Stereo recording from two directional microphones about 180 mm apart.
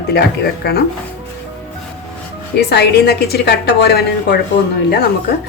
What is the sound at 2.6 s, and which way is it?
A woman's voice, 65° left (ahead or behind).